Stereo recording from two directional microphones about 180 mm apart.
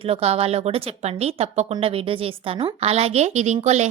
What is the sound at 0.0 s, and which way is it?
A woman's voice, 35° right (ahead or behind).